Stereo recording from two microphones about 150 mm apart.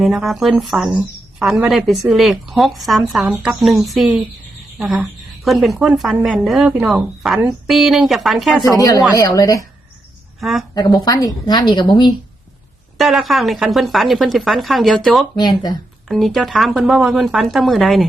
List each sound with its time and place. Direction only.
0.0 s a woman's voice: centre (ahead or behind)
8.7 s a woman's voice: 25° left (ahead or behind)
10.4 s a woman's voice: centre (ahead or behind)
11.0 s a woman's voice: 25° left (ahead or behind)
13.0 s a woman's voice: centre (ahead or behind)
15.4 s a woman's voice: 25° left (ahead or behind)
16.0 s a woman's voice: centre (ahead or behind)